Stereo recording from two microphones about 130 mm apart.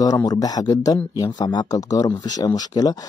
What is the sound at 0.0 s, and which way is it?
Speech, 30° left (ahead or behind).